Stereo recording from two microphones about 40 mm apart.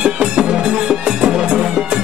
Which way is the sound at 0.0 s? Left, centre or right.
Right.